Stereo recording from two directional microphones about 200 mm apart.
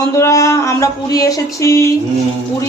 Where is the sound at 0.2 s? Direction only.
15° left (ahead or behind).